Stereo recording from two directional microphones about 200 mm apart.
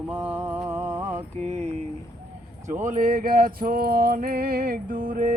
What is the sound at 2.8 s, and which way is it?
Mantra, 40° right (ahead or behind).